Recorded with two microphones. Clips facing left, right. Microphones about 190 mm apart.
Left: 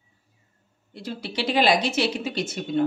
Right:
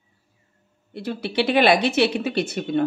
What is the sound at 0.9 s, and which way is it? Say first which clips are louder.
Speech: right 5 dB; 60° right (ahead or behind).